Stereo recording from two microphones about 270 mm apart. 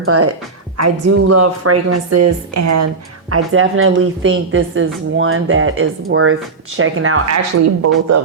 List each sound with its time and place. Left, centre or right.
0.0 s speech: right